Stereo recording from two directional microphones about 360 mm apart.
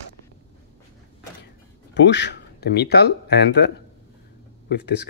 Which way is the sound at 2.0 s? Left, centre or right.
Left.